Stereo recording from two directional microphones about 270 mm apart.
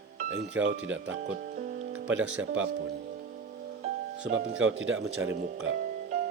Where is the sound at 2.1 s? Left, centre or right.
Centre.